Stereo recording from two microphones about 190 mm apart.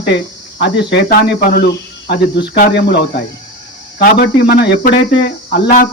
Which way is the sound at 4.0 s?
55° left (ahead or behind).